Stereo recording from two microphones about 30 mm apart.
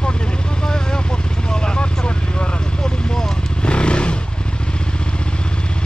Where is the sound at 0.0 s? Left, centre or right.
Left.